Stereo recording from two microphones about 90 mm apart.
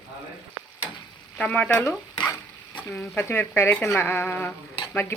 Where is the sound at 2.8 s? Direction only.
25° left (ahead or behind).